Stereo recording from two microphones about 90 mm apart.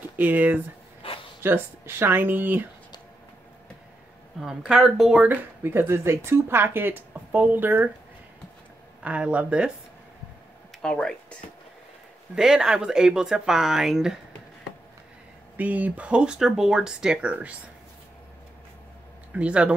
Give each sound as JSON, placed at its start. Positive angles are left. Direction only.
{"t": 0.1, "sound": "speech", "side_deg": -20}
{"t": 4.4, "sound": "speech", "side_deg": -5}
{"t": 5.2, "sound": "speech", "side_deg": -20}
{"t": 9.0, "sound": "speech", "side_deg": -15}
{"t": 10.8, "sound": "speech", "side_deg": 10}
{"t": 12.4, "sound": "speech", "side_deg": -10}
{"t": 15.5, "sound": "speech", "side_deg": -15}
{"t": 19.3, "sound": "speech", "side_deg": -15}